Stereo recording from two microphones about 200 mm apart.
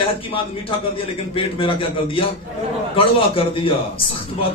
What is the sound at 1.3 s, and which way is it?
A man's voice, 25° left (ahead or behind).